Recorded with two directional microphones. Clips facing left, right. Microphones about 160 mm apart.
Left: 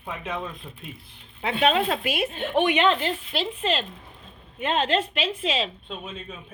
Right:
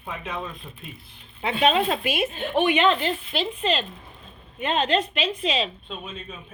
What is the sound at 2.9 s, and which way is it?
Speech, 15° right (ahead or behind).